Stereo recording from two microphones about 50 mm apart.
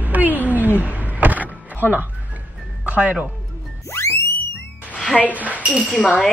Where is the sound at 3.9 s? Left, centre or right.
Left.